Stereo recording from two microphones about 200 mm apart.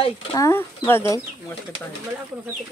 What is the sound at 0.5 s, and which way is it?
Speech, 10° left (ahead or behind).